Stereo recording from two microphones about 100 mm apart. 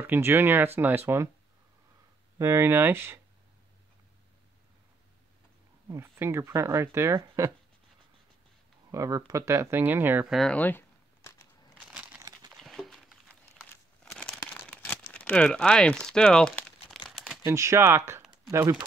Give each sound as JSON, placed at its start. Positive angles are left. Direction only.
{"t": 0.0, "sound": "speech", "side_deg": -20}
{"t": 2.3, "sound": "speech", "side_deg": -25}
{"t": 5.9, "sound": "speech", "side_deg": -25}
{"t": 8.9, "sound": "speech", "side_deg": -35}
{"t": 10.5, "sound": "a sound", "side_deg": 20}
{"t": 11.9, "sound": "crumpling", "side_deg": -10}
{"t": 12.5, "sound": "a sound", "side_deg": 0}
{"t": 14.1, "sound": "crumpling", "side_deg": 5}
{"t": 14.7, "sound": "speech", "side_deg": 20}
{"t": 17.1, "sound": "shuffling cards", "side_deg": 0}
{"t": 17.5, "sound": "speech", "side_deg": -30}